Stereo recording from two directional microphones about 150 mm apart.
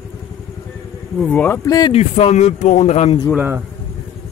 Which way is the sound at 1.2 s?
10° left (ahead or behind).